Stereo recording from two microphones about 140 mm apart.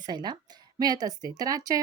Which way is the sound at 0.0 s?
30° right (ahead or behind).